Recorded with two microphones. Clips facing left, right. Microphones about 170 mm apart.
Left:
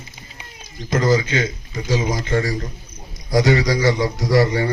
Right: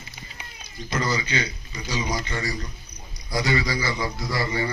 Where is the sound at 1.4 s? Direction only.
45° left (ahead or behind).